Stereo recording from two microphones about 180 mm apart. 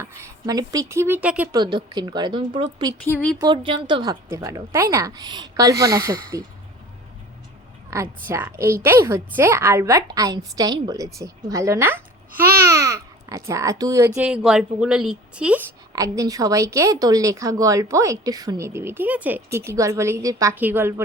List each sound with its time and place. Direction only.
0.0 s speech: 15° right (ahead or behind)
1.5 s a woman's voice: 25° right (ahead or behind)
3.1 s speech: 10° left (ahead or behind)
3.3 s a woman's voice: 25° right (ahead or behind)
7.9 s a child's voice: 15° right (ahead or behind)
14.2 s a woman's voice: 5° right (ahead or behind)
16.0 s speech: 20° right (ahead or behind)